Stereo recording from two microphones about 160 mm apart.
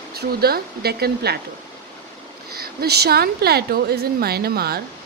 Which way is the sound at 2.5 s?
75° right (ahead or behind).